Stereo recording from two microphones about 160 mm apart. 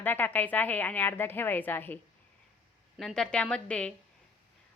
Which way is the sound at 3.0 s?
5° left (ahead or behind).